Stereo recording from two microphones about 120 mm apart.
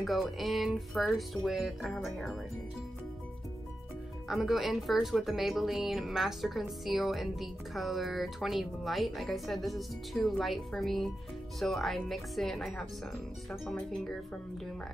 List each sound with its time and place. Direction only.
0.0 s speech: centre (ahead or behind)
4.3 s speech: centre (ahead or behind)